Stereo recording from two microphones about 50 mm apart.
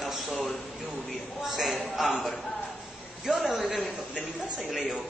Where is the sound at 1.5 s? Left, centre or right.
Centre.